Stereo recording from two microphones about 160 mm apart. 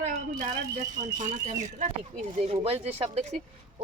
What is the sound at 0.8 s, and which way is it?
Speech, 50° right (ahead or behind).